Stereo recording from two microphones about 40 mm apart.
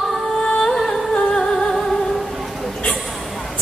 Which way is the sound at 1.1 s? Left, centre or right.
Centre.